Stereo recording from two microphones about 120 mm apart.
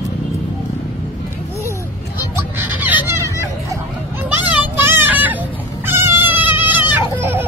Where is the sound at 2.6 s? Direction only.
15° right (ahead or behind).